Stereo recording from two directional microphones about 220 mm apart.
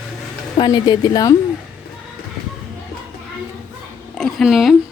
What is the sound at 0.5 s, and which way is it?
Speech, 20° left (ahead or behind).